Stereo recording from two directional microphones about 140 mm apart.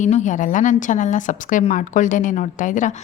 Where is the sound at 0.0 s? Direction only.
60° left (ahead or behind).